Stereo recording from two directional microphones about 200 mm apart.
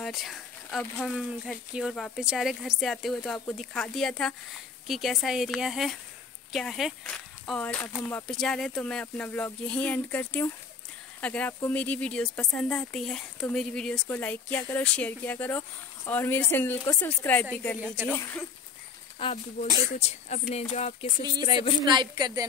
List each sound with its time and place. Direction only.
0.0 s speech: centre (ahead or behind)
17.7 s speech: 5° right (ahead or behind)
18.1 s speech: 10° left (ahead or behind)
19.2 s speech: 25° left (ahead or behind)
20.0 s speech: 35° left (ahead or behind)
21.8 s a woman's voice: 20° right (ahead or behind)